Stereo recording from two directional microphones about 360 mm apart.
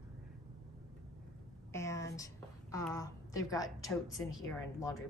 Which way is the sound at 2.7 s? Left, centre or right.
Centre.